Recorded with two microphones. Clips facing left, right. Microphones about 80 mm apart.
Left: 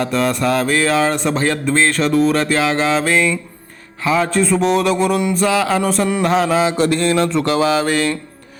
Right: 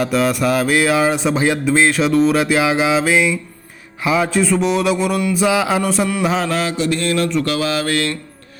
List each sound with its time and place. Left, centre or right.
0.0 s speech: centre
4.0 s a sound: centre
5.5 s speech: centre
5.8 s a sound: centre
6.7 s mantra: left
7.0 s mantra: left